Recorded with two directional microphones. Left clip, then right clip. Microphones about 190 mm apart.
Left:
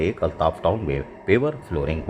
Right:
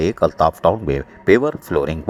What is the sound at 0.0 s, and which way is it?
Speech, 30° right (ahead or behind).